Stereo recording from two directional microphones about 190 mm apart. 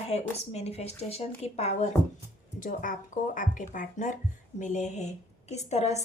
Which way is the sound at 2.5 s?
45° left (ahead or behind).